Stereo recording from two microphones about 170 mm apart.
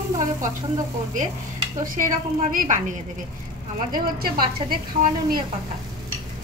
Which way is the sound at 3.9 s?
60° right (ahead or behind).